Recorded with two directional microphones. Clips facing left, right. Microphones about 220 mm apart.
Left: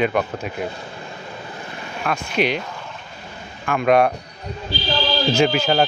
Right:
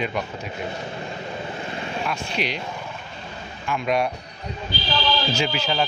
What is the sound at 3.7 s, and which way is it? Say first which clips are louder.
Speech: left 7 dB; 55° left (ahead or behind).